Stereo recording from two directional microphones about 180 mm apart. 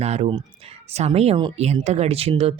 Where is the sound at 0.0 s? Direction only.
35° right (ahead or behind).